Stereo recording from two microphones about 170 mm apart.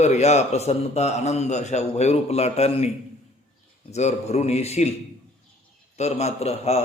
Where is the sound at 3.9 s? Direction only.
40° left (ahead or behind).